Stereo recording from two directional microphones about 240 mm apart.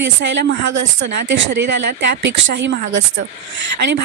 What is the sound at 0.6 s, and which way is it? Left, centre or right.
Speech, right.